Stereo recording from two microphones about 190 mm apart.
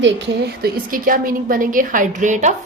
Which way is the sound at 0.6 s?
45° right (ahead or behind).